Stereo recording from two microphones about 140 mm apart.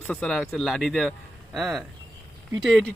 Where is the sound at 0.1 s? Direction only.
5° left (ahead or behind).